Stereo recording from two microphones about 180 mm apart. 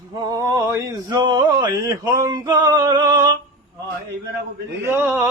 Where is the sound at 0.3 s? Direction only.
20° right (ahead or behind).